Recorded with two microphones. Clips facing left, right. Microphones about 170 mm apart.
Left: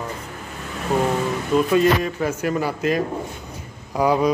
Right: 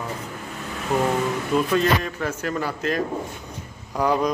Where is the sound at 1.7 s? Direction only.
10° left (ahead or behind).